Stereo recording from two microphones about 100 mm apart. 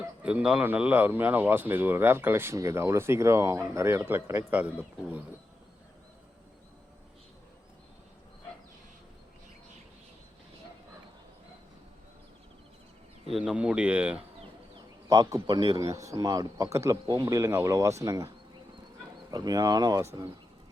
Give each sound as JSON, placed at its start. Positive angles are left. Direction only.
{"t": 0.3, "sound": "speech", "side_deg": -10}
{"t": 4.5, "sound": "speech", "side_deg": -15}
{"t": 13.2, "sound": "speech", "side_deg": 0}
{"t": 15.1, "sound": "a man's voice", "side_deg": -40}
{"t": 19.3, "sound": "a man's voice", "side_deg": -40}
{"t": 20.0, "sound": "speech", "side_deg": -30}